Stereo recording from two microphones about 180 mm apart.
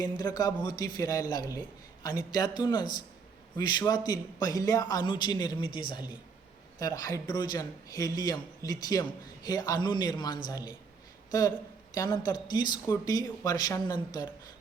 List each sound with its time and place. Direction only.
0.0 s a man's voice: 20° left (ahead or behind)